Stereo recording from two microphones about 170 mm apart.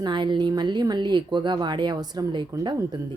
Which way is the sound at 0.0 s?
25° right (ahead or behind).